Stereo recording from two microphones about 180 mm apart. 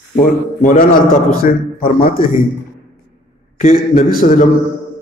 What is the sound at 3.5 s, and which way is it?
Speech, 50° left (ahead or behind).